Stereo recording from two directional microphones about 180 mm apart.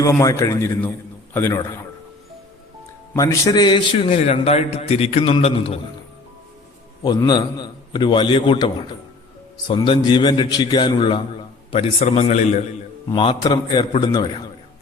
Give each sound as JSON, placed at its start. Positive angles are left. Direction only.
{"t": 0.0, "sound": "a man's voice", "side_deg": 20}
{"t": 3.2, "sound": "a man's voice", "side_deg": 20}
{"t": 7.0, "sound": "a man's voice", "side_deg": 20}
{"t": 13.1, "sound": "a man's voice", "side_deg": 25}